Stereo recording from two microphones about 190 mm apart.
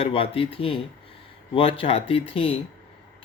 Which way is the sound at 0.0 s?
30° left (ahead or behind).